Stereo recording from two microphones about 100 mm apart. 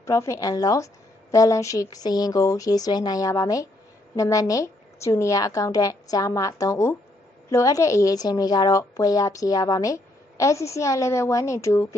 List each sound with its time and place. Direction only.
0.0 s a woman's voice: 30° left (ahead or behind)